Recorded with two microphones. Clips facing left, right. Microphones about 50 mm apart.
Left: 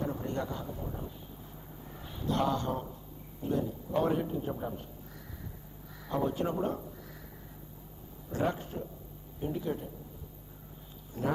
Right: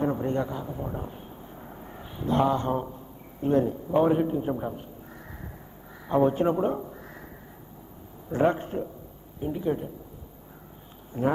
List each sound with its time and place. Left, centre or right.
0.0 s a sound: right
0.8 s vehicle: right
2.0 s speech: right
3.3 s a man's voice: right
3.9 s a man's voice: right
6.0 s a man's voice: right
8.3 s a man's voice: right
9.4 s a man's voice: centre
11.1 s a man's voice: right